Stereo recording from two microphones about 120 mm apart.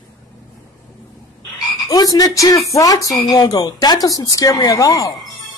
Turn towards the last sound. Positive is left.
turn(degrees=30)  # may be behind; listen again after turning